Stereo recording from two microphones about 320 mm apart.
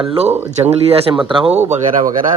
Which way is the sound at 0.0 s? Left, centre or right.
Centre.